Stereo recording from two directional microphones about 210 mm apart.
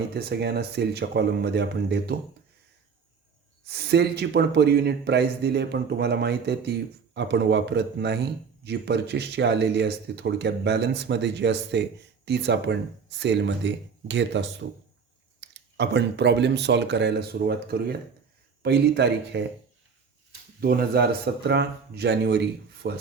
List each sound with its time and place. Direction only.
0.1 s a man's voice: 50° right (ahead or behind)
3.7 s a man's voice: 50° right (ahead or behind)
20.6 s a man's voice: 45° right (ahead or behind)